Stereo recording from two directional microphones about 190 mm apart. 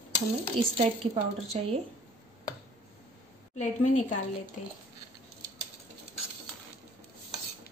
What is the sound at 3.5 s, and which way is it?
Speech, 40° left (ahead or behind).